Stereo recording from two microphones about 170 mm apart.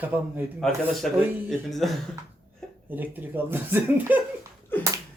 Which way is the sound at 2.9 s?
10° right (ahead or behind).